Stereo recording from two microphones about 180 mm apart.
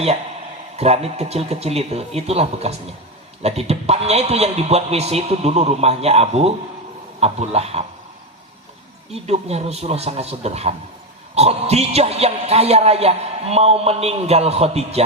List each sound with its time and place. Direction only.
0.8 s speech: 35° right (ahead or behind)
9.1 s speech: 35° right (ahead or behind)